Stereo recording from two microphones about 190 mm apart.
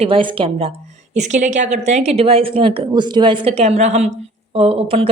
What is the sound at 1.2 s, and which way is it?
Speech, 40° right (ahead or behind).